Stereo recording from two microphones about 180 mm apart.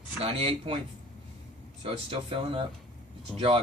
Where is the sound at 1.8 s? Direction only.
30° right (ahead or behind).